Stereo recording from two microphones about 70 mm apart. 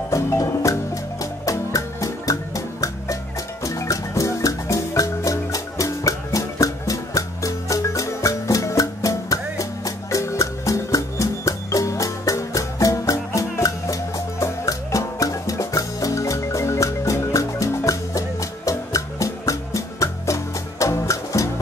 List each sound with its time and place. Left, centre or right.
0.1 s music: left